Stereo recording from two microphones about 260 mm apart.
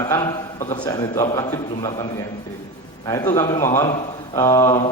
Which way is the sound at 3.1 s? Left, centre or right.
Centre.